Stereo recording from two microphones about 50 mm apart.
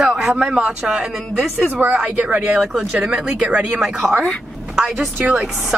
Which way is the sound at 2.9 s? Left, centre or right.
Centre.